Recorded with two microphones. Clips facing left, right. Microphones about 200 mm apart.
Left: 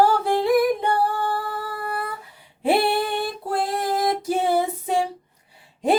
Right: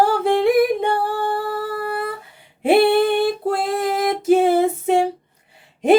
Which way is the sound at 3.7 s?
25° right (ahead or behind).